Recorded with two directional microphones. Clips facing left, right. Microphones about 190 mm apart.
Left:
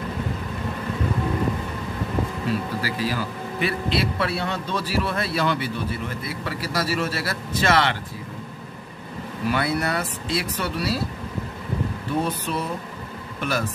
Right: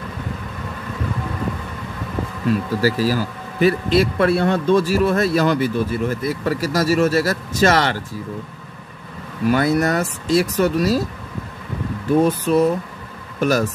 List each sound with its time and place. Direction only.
2.8 s speech: 40° right (ahead or behind)
9.5 s speech: 45° right (ahead or behind)
12.1 s speech: 45° right (ahead or behind)